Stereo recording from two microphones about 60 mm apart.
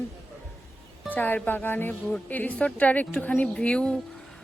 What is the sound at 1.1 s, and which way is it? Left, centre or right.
Speech, left.